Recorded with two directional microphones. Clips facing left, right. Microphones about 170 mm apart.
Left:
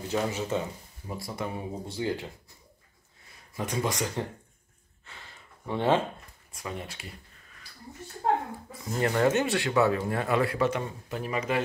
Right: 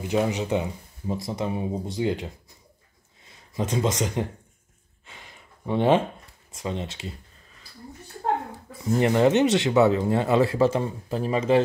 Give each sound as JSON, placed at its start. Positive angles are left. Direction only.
{"t": 0.0, "sound": "speech", "side_deg": -15}
{"t": 5.0, "sound": "a sound", "side_deg": -20}
{"t": 6.5, "sound": "speech", "side_deg": -25}
{"t": 9.0, "sound": "speech", "side_deg": -20}